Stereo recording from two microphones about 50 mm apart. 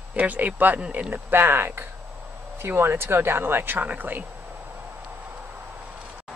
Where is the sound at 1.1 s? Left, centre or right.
Right.